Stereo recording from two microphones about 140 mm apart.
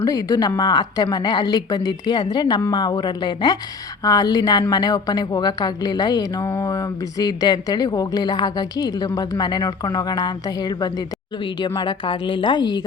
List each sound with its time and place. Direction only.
0.0 s a woman's voice: 25° left (ahead or behind)